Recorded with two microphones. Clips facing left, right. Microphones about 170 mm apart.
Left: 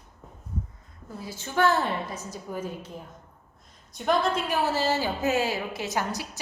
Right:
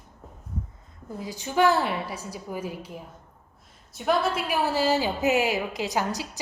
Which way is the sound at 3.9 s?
5° right (ahead or behind).